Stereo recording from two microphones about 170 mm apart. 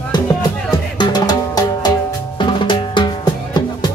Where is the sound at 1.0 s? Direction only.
25° left (ahead or behind).